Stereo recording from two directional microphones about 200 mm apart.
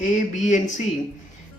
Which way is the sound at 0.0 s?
40° left (ahead or behind).